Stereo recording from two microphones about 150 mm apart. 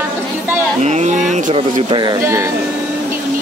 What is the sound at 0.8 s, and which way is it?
Speech, 50° right (ahead or behind).